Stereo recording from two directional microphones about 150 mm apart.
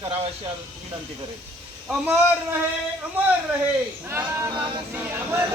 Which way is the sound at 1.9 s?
10° right (ahead or behind).